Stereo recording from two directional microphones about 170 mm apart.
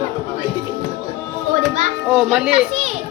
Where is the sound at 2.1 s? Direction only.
5° right (ahead or behind).